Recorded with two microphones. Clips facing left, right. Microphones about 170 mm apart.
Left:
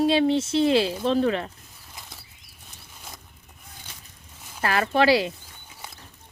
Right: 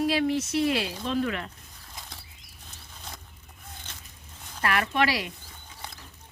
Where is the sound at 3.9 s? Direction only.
10° left (ahead or behind).